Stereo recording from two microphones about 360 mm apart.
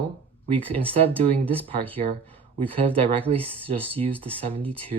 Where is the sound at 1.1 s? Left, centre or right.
Centre.